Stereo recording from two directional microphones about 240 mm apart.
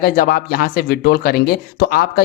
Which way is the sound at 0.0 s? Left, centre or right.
Left.